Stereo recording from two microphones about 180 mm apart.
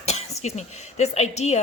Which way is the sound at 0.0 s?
35° left (ahead or behind).